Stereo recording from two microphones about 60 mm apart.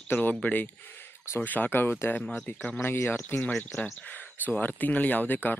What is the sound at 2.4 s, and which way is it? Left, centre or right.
Speech, left.